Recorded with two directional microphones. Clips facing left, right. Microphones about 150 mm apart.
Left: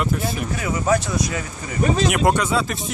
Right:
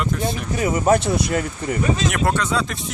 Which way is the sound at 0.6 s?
35° right (ahead or behind).